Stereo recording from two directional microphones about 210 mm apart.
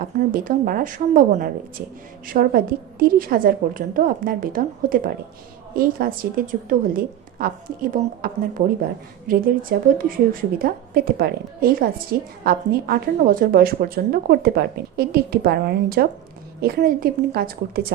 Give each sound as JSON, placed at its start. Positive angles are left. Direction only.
{"t": 0.2, "sound": "a woman's voice", "side_deg": -40}